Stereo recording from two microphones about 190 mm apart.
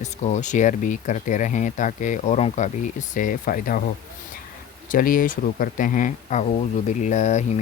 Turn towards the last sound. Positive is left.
turn(degrees=40)  # may be behind; listen again after turning